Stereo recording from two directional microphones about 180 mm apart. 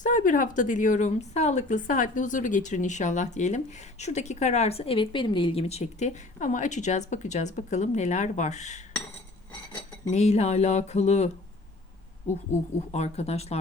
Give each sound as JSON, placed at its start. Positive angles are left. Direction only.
{"t": 0.0, "sound": "a woman's voice", "side_deg": 45}
{"t": 10.1, "sound": "a woman's voice", "side_deg": 40}
{"t": 12.9, "sound": "a woman's voice", "side_deg": 35}